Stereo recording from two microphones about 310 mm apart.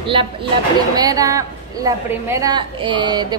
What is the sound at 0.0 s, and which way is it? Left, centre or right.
A woman's voice, centre.